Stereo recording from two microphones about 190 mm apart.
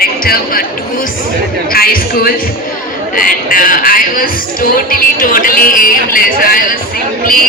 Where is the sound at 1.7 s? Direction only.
50° left (ahead or behind).